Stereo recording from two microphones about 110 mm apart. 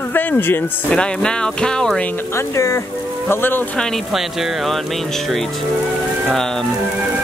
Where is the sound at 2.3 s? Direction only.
30° left (ahead or behind).